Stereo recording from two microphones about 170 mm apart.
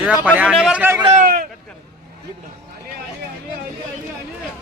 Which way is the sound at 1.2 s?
55° right (ahead or behind).